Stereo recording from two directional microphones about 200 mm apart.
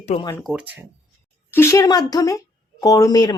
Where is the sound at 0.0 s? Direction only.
35° left (ahead or behind).